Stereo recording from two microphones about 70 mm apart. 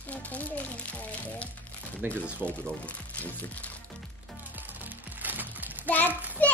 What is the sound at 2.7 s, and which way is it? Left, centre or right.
Speech, left.